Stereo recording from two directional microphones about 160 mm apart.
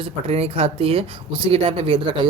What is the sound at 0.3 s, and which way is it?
Speech, 40° right (ahead or behind).